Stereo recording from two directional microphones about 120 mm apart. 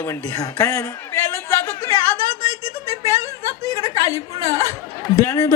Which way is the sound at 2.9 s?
25° right (ahead or behind).